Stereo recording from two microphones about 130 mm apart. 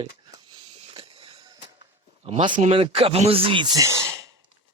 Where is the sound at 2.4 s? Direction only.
40° right (ahead or behind).